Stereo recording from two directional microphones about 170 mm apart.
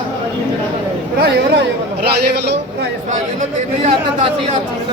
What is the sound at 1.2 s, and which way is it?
Speech, 80° right.